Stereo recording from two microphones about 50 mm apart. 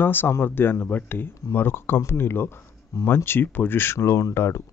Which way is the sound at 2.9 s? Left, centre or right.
Left.